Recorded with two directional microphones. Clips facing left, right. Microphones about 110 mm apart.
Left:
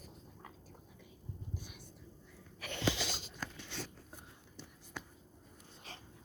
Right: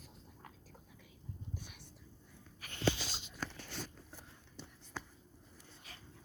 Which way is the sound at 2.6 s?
80° left.